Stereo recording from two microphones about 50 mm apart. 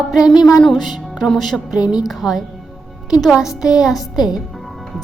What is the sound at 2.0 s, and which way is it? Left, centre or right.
A child's voice, centre.